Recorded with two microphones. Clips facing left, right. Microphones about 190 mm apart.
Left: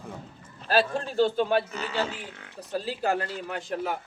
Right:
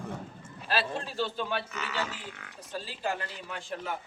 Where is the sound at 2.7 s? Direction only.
65° left (ahead or behind).